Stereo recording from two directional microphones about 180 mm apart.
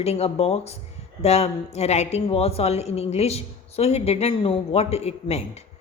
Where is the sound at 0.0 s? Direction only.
35° left (ahead or behind).